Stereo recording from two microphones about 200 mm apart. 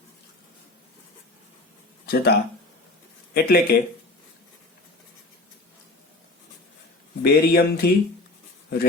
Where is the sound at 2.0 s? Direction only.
50° left (ahead or behind).